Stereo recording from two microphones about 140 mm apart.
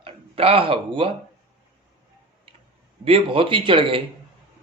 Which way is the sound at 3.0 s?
40° right (ahead or behind).